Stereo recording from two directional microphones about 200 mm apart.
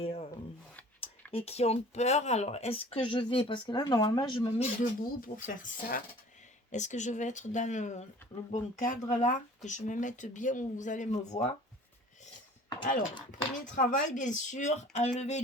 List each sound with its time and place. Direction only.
0.0 s a sound: 30° left (ahead or behind)
1.3 s speech: 30° left (ahead or behind)
4.8 s speech: 40° left (ahead or behind)
12.8 s speech: 40° left (ahead or behind)